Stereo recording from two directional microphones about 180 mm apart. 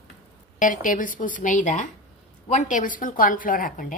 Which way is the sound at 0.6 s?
45° left (ahead or behind).